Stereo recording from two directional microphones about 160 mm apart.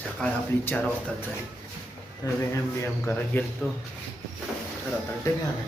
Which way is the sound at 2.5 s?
15° left (ahead or behind).